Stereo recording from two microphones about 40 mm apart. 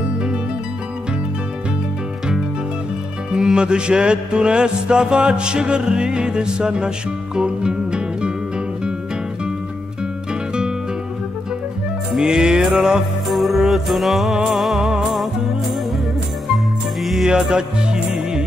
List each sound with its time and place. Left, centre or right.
3.5 s music: right
12.2 s music: centre
13.3 s music: centre
17.0 s music: centre
17.3 s music: centre